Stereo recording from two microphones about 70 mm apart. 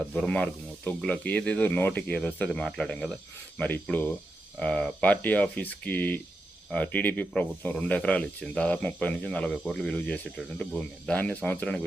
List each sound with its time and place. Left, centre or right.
0.0 s speech: centre
2.5 s speech: centre
3.6 s speech: left
4.6 s speech: centre
5.0 s speech: left; by 9.9 s centre
9.9 s speech: centre